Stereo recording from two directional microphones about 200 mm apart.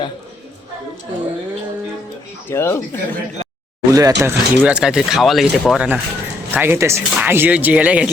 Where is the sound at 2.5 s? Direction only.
15° left (ahead or behind).